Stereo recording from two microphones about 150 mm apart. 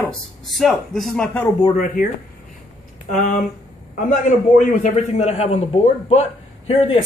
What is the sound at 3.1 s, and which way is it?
Speech, 55° left (ahead or behind).